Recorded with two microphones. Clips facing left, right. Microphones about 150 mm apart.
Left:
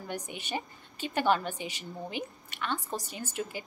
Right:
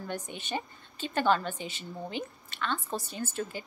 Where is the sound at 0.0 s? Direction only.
10° left (ahead or behind).